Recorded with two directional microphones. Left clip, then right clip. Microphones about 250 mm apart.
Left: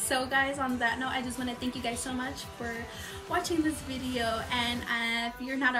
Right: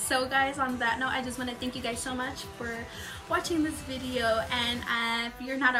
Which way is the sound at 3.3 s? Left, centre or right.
Centre.